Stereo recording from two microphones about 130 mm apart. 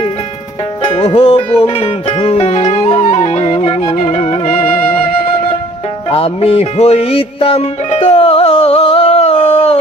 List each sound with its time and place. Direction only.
0.9 s music: 45° left (ahead or behind)
6.1 s music: 45° left (ahead or behind)